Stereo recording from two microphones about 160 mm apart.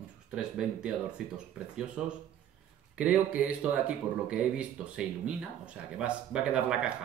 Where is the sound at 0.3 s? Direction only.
5° right (ahead or behind).